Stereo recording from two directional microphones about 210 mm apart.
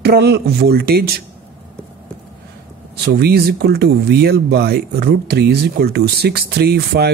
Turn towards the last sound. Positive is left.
turn(degrees=-50)  # may be behind; listen again after turning